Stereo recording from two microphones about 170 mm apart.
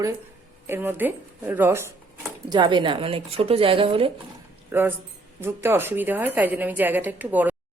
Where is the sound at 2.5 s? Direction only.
30° right (ahead or behind).